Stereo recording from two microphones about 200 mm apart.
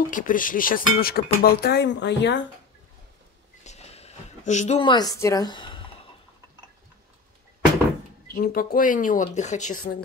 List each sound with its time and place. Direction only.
0.1 s speech: 40° left (ahead or behind); by 2.4 s 60° left (ahead or behind)
3.6 s a sound: 35° left (ahead or behind)
8.4 s speech: 50° left (ahead or behind)